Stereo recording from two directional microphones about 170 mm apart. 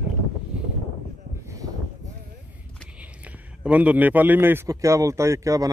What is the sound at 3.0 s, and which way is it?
A man's voice, 10° right (ahead or behind).